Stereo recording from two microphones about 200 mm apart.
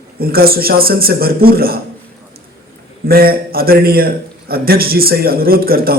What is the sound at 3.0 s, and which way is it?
A man's voice, 50° right (ahead or behind).